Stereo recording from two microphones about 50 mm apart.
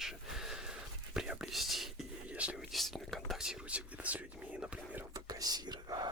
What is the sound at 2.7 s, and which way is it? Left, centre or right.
Whispering, centre.